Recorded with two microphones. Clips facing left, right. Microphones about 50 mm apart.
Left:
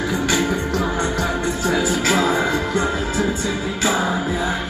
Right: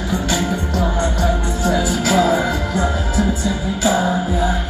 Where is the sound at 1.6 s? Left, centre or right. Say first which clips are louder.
Right 2 dB; left.